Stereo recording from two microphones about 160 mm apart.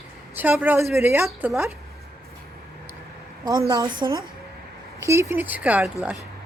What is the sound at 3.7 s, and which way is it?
A woman's voice, 25° right (ahead or behind).